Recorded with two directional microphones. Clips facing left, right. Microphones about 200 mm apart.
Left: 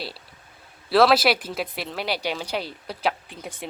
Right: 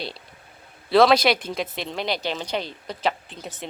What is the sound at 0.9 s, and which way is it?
Speech, 5° left (ahead or behind).